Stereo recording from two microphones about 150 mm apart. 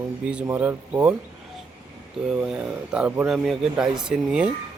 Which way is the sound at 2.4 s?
10° right (ahead or behind).